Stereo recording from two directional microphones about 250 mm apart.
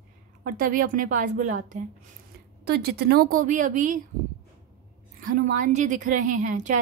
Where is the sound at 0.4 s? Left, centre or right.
Right.